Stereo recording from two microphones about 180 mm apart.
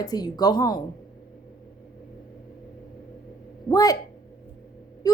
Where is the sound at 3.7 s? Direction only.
20° left (ahead or behind).